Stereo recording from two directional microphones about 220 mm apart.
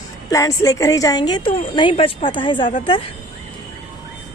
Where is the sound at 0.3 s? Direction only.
15° left (ahead or behind).